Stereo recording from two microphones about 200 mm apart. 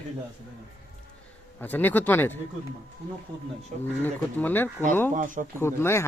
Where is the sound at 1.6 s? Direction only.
10° left (ahead or behind).